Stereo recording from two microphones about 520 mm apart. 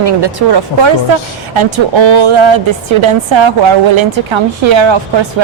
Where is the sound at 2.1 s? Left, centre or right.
Right.